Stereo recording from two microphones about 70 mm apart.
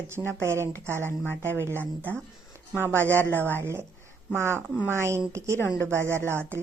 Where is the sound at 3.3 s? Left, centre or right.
Left.